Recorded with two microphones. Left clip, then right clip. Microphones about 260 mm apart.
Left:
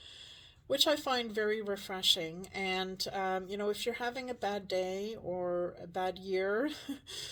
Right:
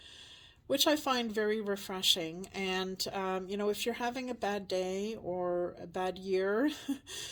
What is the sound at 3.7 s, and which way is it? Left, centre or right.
Speech, right.